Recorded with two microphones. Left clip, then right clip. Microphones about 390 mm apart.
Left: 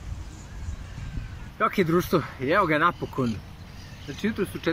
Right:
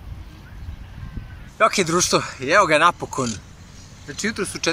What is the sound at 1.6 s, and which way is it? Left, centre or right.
Speech, centre.